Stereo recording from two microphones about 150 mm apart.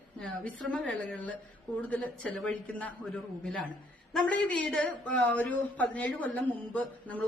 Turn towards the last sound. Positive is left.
turn(degrees=10)  # may be behind; listen again after turning